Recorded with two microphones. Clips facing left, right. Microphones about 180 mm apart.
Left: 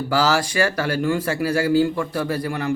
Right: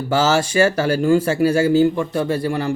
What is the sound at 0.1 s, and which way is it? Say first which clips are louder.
Speech: right 3 dB; 25° right (ahead or behind).